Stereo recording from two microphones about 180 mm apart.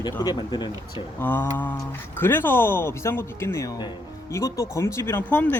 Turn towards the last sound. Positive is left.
turn(degrees=10)  # may be behind; listen again after turning